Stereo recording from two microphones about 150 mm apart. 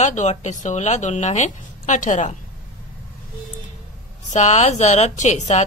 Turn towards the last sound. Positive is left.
turn(degrees=50)  # may be behind; listen again after turning